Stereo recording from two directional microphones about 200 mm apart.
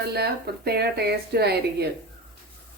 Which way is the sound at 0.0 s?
50° right (ahead or behind).